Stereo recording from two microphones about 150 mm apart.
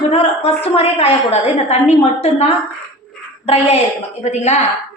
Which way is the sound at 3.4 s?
40° left (ahead or behind).